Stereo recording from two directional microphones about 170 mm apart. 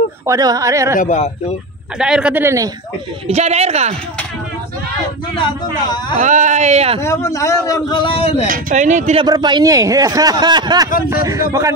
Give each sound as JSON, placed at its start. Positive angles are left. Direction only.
{"t": 0.3, "sound": "a man's voice", "side_deg": -20}
{"t": 0.9, "sound": "speech", "side_deg": 45}
{"t": 2.0, "sound": "a man's voice", "side_deg": -5}
{"t": 3.3, "sound": "speech", "side_deg": -40}
{"t": 5.4, "sound": "a man's voice", "side_deg": 25}
{"t": 6.1, "sound": "speech", "side_deg": -45}
{"t": 7.0, "sound": "a man's voice", "side_deg": 15}
{"t": 8.5, "sound": "speech", "side_deg": -50}
{"t": 9.2, "sound": "speech", "side_deg": -25}